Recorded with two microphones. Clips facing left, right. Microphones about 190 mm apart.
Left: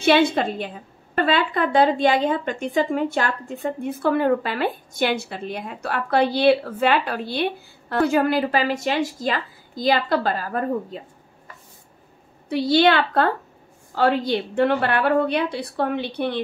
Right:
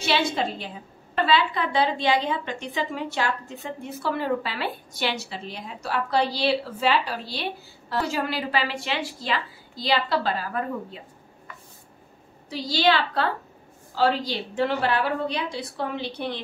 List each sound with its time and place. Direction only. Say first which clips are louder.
0.0 s a woman's voice: left 7 dB; 55° left (ahead or behind)
12.4 s a woman's voice: left 6 dB; 60° left (ahead or behind)